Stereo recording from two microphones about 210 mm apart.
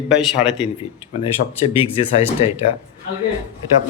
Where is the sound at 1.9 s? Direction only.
25° left (ahead or behind).